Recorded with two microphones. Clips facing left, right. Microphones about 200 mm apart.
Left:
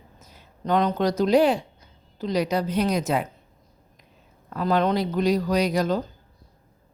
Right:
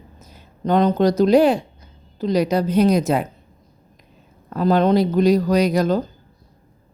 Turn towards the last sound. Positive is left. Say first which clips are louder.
# right 5 dB
turn(degrees=-45)  # may be behind; listen again after turning